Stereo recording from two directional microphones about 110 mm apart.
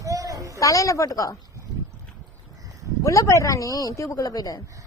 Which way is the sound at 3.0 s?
30° left (ahead or behind).